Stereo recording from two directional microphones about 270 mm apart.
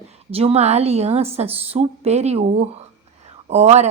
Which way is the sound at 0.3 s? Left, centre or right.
Right.